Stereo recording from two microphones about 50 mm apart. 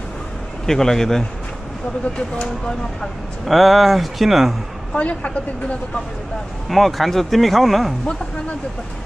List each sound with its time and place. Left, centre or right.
0.7 s speech: centre
3.4 s speech: centre
4.9 s speech: left
6.7 s speech: centre